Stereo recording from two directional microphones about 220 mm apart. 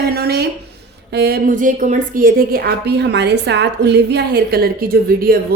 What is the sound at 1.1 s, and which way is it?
A woman's voice, 45° right (ahead or behind).